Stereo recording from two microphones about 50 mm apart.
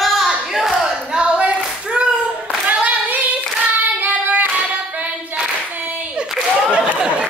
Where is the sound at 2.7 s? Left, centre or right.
Right.